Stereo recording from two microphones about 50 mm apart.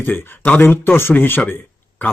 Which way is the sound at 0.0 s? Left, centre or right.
Left.